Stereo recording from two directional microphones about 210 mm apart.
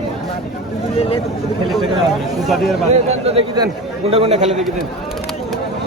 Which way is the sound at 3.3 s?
20° right (ahead or behind).